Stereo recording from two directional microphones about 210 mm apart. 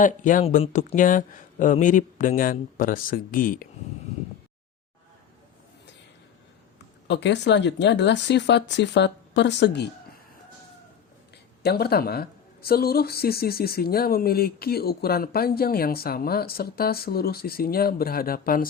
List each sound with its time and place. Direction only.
0.0 s speech: 40° left (ahead or behind)
7.1 s speech: 55° left (ahead or behind)
11.6 s a woman's voice: 50° left (ahead or behind)